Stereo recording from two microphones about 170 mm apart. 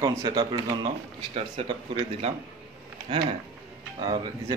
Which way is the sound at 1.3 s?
35° right (ahead or behind).